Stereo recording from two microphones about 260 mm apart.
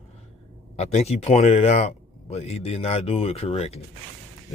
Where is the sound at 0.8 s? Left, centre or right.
Left.